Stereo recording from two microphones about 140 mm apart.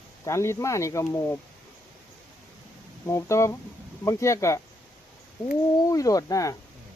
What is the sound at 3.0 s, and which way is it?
Speech, 20° left (ahead or behind).